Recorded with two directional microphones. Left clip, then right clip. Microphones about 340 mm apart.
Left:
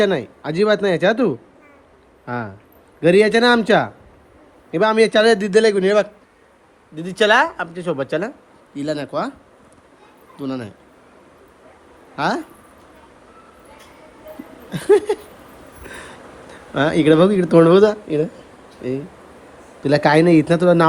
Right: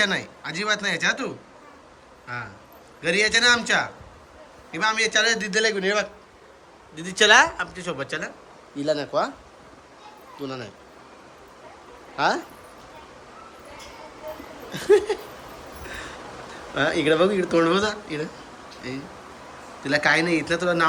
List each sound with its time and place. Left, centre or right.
0.0 s speech: centre
8.8 s speech: centre
10.4 s speech: centre
12.1 s speech: centre
14.7 s speech: centre
16.7 s speech: centre
19.8 s speech: centre